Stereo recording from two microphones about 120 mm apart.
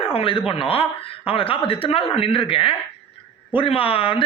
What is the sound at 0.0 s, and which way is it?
Speech, 50° left (ahead or behind).